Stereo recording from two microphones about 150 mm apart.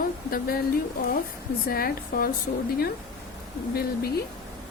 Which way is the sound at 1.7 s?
80° left.